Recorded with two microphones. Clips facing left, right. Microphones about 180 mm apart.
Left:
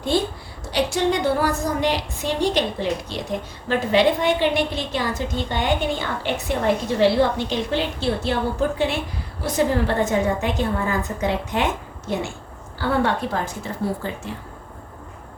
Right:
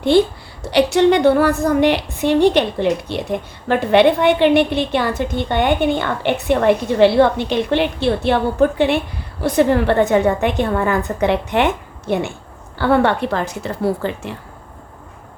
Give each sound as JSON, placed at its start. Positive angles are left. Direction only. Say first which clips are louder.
{"t": 0.7, "sound": "a woman's voice", "louder": "right 8 dB", "side_deg": -65}